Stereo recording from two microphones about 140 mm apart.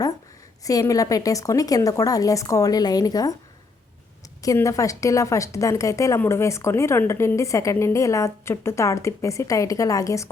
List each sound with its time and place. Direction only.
0.6 s a woman's voice: 25° left (ahead or behind)
4.4 s a woman's voice: 25° left (ahead or behind)